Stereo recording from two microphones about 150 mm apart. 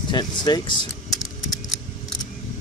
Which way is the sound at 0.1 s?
25° left (ahead or behind).